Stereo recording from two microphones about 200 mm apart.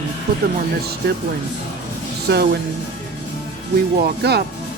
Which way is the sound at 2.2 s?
55° right (ahead or behind).